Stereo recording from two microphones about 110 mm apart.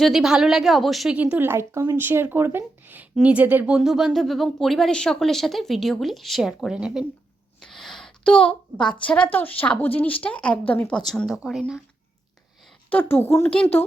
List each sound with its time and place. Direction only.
0.0 s speech: 5° right (ahead or behind)
1.1 s speech: 15° right (ahead or behind)
3.8 s a woman's voice: 5° right (ahead or behind); by 11.0 s 15° left (ahead or behind)
11.0 s speech: centre (ahead or behind)
12.9 s speech: 15° left (ahead or behind)